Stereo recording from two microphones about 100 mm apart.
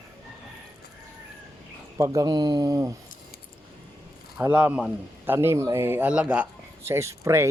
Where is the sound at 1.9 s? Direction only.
35° right (ahead or behind).